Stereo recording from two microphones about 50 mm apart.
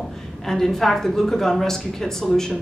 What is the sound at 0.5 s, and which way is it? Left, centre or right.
Speech, centre.